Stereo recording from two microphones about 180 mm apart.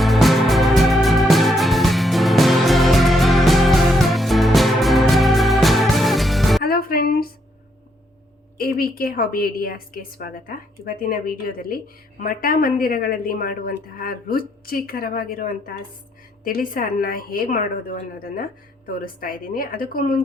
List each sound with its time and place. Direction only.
0.0 s music: centre (ahead or behind)
6.6 s music: 55° left (ahead or behind)
8.5 s a woman's voice: 55° left (ahead or behind)